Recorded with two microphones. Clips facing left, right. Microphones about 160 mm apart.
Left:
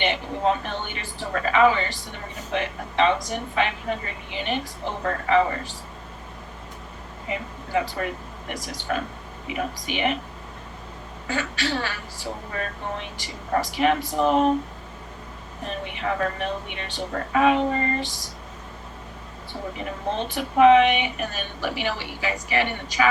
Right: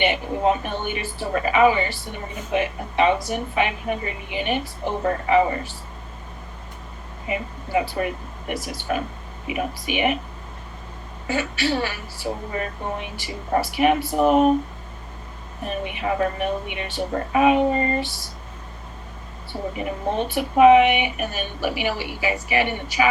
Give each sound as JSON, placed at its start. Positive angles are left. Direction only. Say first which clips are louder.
{"t": 0.0, "sound": "a woman's voice", "louder": "right 3 dB", "side_deg": -15}
{"t": 7.3, "sound": "a woman's voice", "louder": "right 3 dB", "side_deg": -15}
{"t": 11.3, "sound": "a woman's voice", "louder": "right 4 dB", "side_deg": -15}
{"t": 15.6, "sound": "a woman's voice", "louder": "right 3 dB", "side_deg": -15}
{"t": 19.7, "sound": "a woman's voice", "louder": "right 3 dB", "side_deg": -15}